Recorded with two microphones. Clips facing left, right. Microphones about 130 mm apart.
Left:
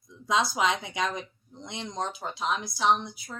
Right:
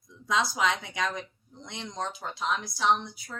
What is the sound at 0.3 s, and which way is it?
Speech, 20° left (ahead or behind).